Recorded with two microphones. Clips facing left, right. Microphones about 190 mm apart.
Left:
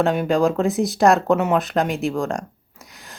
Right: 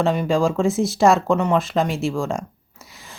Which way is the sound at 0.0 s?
Centre (ahead or behind).